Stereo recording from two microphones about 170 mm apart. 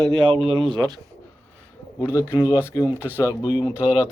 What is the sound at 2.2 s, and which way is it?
Speech, 15° left (ahead or behind).